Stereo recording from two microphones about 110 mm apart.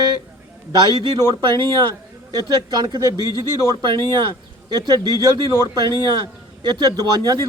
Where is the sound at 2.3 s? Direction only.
40° right (ahead or behind).